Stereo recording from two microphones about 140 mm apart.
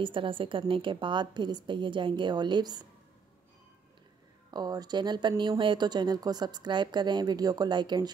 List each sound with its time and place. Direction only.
0.0 s a woman's voice: 35° right (ahead or behind)
4.5 s a woman's voice: 30° right (ahead or behind)